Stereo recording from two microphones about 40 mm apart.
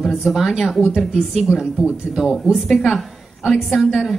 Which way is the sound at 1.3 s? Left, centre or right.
Centre.